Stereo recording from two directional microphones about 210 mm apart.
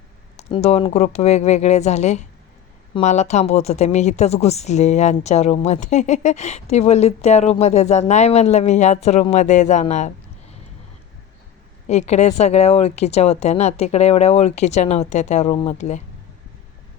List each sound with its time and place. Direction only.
0.3 s a woman's voice: 30° left (ahead or behind)
11.9 s a woman's voice: 30° left (ahead or behind)